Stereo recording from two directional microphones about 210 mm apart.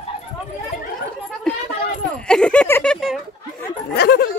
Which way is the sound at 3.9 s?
50° left (ahead or behind).